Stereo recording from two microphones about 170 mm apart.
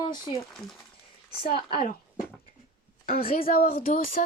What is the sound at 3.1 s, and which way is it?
Speech, 60° left (ahead or behind).